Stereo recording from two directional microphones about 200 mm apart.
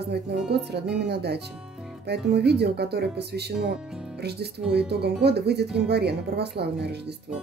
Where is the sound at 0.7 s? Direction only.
55° right (ahead or behind).